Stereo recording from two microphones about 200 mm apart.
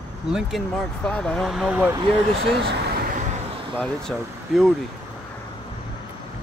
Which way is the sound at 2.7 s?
45° right (ahead or behind).